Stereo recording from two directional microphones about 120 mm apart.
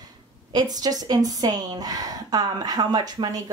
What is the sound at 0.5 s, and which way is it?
A woman's voice, 35° right (ahead or behind).